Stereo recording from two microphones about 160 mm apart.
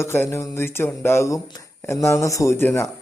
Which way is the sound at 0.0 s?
15° left (ahead or behind).